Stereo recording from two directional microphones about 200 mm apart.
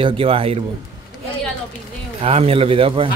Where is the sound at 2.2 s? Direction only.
30° right (ahead or behind).